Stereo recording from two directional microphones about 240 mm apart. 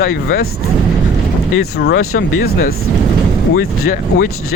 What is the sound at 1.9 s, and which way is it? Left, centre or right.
Speech, left.